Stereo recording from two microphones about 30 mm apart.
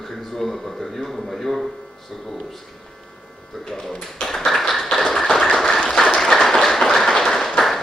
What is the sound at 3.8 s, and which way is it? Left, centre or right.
Speech, centre.